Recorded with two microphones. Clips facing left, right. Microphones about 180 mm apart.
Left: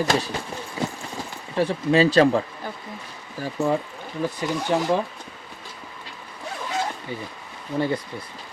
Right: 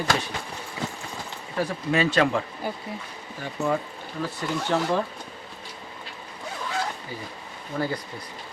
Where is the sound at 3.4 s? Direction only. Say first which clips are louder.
Left 3 dB; 30° left (ahead or behind).